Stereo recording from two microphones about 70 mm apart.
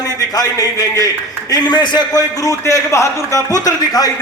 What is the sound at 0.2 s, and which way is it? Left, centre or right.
A man's voice, left.